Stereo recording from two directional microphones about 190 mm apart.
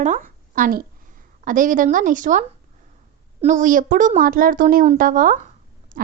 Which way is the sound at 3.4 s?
40° right (ahead or behind).